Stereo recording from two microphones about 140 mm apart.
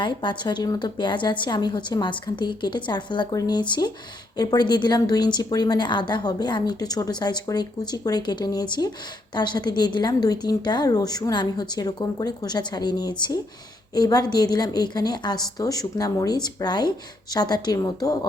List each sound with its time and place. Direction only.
0.0 s a woman's voice: 35° left (ahead or behind)